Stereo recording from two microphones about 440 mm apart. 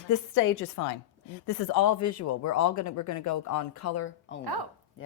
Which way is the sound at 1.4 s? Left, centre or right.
Left.